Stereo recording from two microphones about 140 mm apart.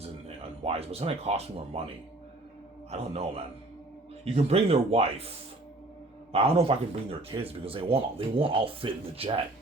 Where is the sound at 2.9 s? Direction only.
50° right (ahead or behind).